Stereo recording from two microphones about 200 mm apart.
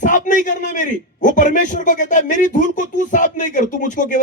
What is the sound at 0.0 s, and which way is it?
A man's voice, 40° left (ahead or behind).